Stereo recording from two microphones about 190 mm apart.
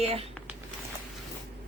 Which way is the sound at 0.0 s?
30° right (ahead or behind).